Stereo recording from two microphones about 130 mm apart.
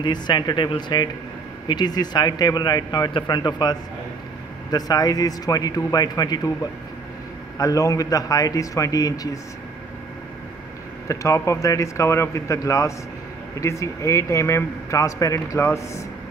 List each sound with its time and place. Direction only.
0.0 s a man's voice: 35° left (ahead or behind)
11.1 s a man's voice: 25° left (ahead or behind)